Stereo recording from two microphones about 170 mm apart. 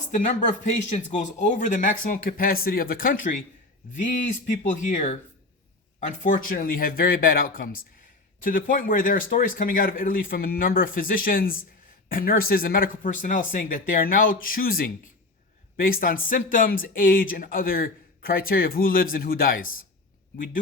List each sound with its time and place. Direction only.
0.1 s speech: 50° left (ahead or behind)